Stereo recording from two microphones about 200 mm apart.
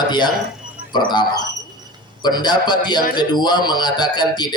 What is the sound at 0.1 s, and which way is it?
Speech, 20° left (ahead or behind).